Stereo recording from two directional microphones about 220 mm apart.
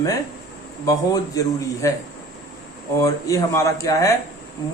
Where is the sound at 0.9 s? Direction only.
15° left (ahead or behind).